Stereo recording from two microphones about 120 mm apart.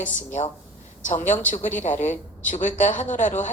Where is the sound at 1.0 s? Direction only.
90° left.